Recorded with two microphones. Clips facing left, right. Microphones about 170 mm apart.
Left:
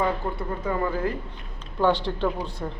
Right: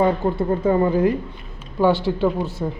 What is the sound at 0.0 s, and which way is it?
Speech, 25° right (ahead or behind).